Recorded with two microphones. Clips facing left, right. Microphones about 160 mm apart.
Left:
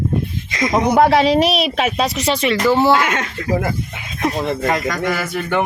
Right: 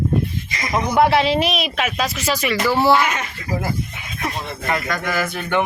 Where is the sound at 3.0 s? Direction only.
90° left.